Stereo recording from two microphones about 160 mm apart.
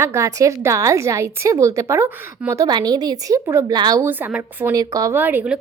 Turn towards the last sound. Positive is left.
turn(degrees=-10)  # may be behind; listen again after turning